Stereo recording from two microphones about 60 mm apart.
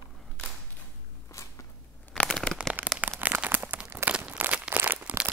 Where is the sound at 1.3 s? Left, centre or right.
Left.